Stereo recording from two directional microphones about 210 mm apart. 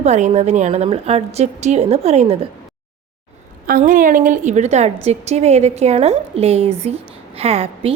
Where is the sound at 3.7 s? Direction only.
40° right (ahead or behind).